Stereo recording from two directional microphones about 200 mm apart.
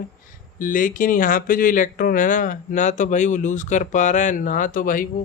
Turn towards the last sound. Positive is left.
turn(degrees=40)  # may be behind; listen again after turning